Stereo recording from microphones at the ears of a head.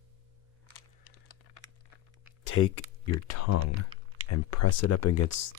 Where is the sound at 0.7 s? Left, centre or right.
Left.